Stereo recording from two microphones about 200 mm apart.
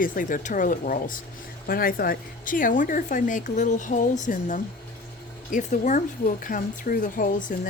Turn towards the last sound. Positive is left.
turn(degrees=40)  # may be behind; listen again after turning